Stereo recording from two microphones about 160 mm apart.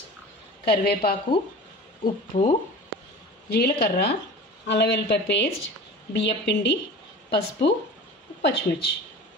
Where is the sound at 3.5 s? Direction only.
75° left (ahead or behind).